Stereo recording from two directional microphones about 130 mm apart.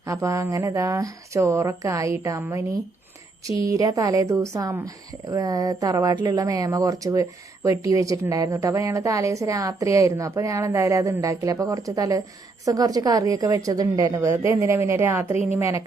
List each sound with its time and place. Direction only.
0.0 s speech: 25° right (ahead or behind)
3.7 s speech: 25° right (ahead or behind)